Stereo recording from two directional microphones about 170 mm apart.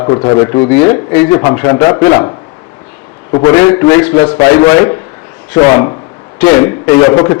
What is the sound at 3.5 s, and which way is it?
A man's voice, 20° left (ahead or behind).